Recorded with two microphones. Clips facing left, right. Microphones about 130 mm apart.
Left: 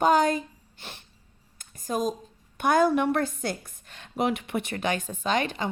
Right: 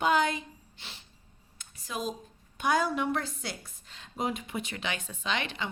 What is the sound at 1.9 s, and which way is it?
Speech, 45° left (ahead or behind).